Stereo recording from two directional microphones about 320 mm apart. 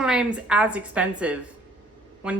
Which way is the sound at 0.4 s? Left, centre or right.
Centre.